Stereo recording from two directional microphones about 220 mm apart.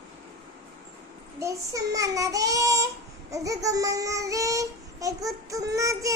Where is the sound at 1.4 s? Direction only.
15° right (ahead or behind).